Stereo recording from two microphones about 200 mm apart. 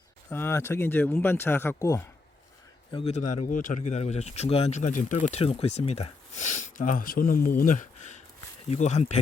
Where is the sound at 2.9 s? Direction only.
30° left (ahead or behind).